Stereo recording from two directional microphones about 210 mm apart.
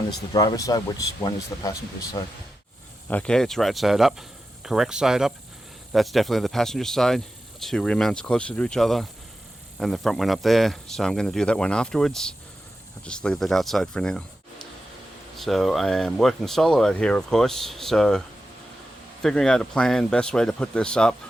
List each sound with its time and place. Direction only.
0.2 s speech: 15° left (ahead or behind)
3.1 s speech: 5° left (ahead or behind)
15.4 s speech: centre (ahead or behind)
19.2 s speech: 5° left (ahead or behind)